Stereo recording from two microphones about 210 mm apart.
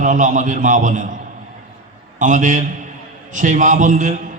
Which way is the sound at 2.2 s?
35° right (ahead or behind).